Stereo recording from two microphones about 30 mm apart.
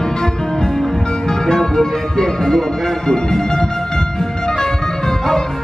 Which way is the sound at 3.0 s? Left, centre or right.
Left.